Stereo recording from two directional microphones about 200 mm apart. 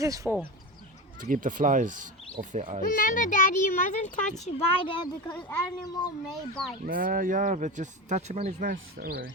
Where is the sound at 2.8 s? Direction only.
40° left (ahead or behind); by 6.1 s 20° left (ahead or behind).